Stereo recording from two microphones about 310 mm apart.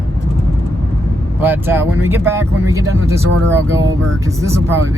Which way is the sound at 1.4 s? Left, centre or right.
Centre.